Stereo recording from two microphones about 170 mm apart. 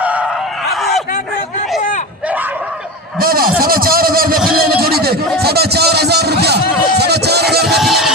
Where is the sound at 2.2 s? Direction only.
10° right (ahead or behind).